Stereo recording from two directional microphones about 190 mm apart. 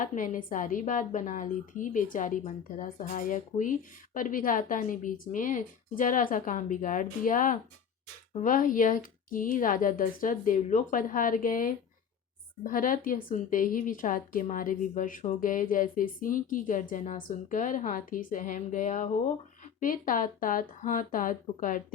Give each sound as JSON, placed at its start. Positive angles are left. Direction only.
{"t": 0.0, "sound": "a woman's voice", "side_deg": 45}